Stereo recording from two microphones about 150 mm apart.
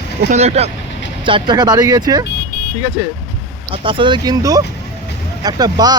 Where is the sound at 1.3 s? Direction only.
30° right (ahead or behind).